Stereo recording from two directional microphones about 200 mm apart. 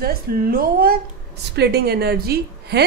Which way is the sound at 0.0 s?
50° right (ahead or behind).